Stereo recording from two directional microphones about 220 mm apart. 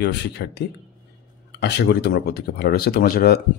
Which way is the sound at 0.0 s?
50° left (ahead or behind).